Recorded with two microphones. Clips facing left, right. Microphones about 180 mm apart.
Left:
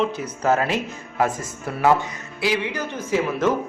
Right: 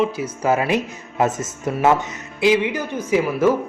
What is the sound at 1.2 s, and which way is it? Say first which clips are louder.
A man's voice: right 3 dB; 20° right (ahead or behind).